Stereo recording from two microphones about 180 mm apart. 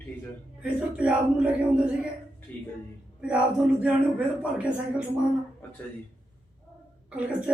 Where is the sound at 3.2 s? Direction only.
5° right (ahead or behind).